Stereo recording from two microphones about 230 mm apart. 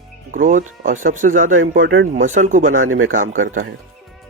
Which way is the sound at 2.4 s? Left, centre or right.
Right.